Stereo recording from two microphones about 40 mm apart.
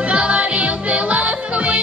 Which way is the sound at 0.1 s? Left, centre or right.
Right.